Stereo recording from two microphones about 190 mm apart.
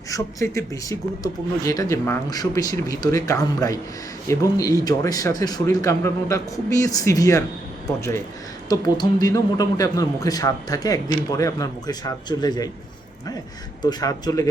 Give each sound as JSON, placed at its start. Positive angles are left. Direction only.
{"t": 0.1, "sound": "speech", "side_deg": 15}
{"t": 13.8, "sound": "speech", "side_deg": 20}